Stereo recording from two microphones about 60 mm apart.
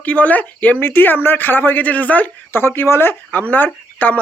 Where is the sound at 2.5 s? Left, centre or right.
Left.